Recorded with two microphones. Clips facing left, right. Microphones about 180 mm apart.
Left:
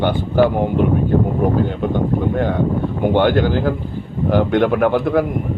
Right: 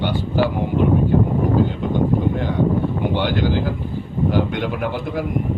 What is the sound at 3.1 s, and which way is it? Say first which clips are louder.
A man's voice: left 7 dB; 55° left (ahead or behind).